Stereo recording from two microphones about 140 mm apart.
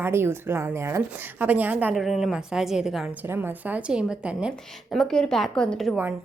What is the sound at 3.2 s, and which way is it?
A woman's voice, 15° right (ahead or behind).